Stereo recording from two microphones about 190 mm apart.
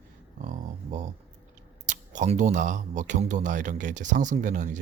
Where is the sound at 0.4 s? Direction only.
40° right (ahead or behind).